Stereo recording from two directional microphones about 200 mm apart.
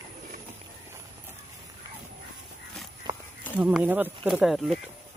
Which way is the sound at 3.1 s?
20° right (ahead or behind).